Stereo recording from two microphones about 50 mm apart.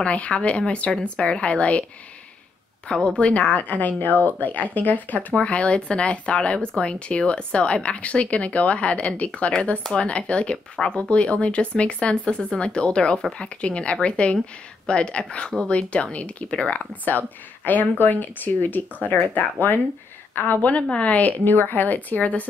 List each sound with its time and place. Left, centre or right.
0.0 s speech: left
3.2 s speech: left
5.4 s speech: left
20.9 s speech: left